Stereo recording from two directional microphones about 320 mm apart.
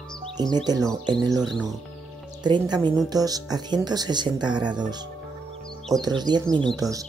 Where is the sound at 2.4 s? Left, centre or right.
Centre.